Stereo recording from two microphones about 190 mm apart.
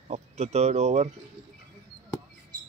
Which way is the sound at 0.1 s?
35° right (ahead or behind).